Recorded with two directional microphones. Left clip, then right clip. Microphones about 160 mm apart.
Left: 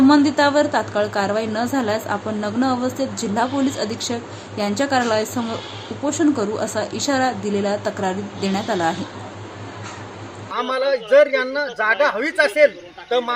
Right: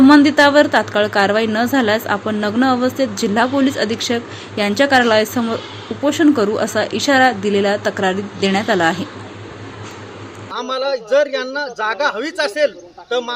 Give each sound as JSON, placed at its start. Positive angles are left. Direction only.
{"t": 0.1, "sound": "a woman's voice", "side_deg": -15}
{"t": 10.5, "sound": "a man's voice", "side_deg": -30}